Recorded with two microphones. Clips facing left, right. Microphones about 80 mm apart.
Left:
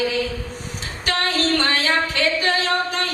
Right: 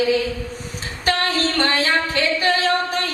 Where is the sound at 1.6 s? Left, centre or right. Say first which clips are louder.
Right 1 dB; right.